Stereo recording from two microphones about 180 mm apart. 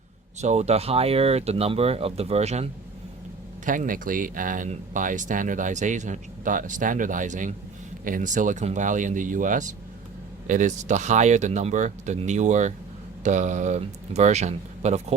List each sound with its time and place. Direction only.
0.4 s speech: 35° right (ahead or behind)
3.7 s speech: 50° right (ahead or behind)